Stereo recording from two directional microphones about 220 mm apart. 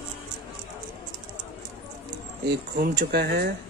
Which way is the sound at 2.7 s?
45° right (ahead or behind).